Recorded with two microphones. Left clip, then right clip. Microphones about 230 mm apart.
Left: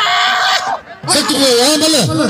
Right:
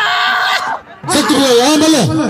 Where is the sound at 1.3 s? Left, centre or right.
Left.